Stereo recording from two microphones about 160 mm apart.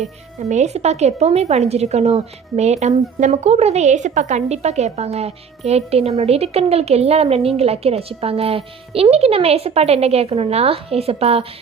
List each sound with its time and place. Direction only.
0.3 s a woman's voice: 45° right (ahead or behind)